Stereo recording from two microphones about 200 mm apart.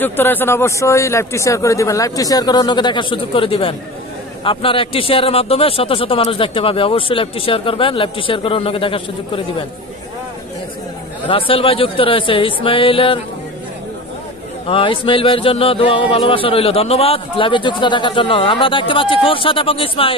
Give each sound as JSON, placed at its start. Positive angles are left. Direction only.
{"t": 0.0, "sound": "speech", "side_deg": 10}
{"t": 11.2, "sound": "speech", "side_deg": 25}
{"t": 14.7, "sound": "speech", "side_deg": 25}